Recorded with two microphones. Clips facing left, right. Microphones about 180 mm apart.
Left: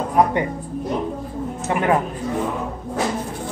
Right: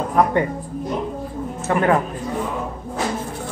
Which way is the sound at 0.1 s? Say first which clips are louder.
Even; 15° left (ahead or behind).